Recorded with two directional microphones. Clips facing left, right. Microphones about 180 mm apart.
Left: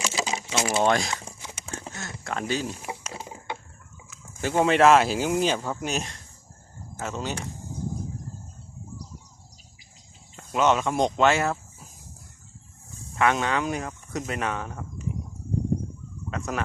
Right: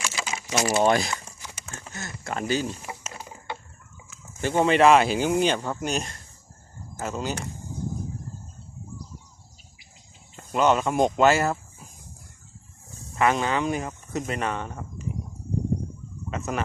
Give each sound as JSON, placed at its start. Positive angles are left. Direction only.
{"t": 0.0, "sound": "crumpling", "side_deg": 30}
{"t": 0.6, "sound": "speech", "side_deg": -5}
{"t": 1.2, "sound": "a sound", "side_deg": 20}
{"t": 1.9, "sound": "speech", "side_deg": 0}
{"t": 2.6, "sound": "speech", "side_deg": 10}
{"t": 3.1, "sound": "a sound", "side_deg": 20}
{"t": 4.1, "sound": "speech", "side_deg": 0}
{"t": 10.3, "sound": "speech", "side_deg": 0}
{"t": 13.1, "sound": "speech", "side_deg": 0}
{"t": 16.3, "sound": "speech", "side_deg": 0}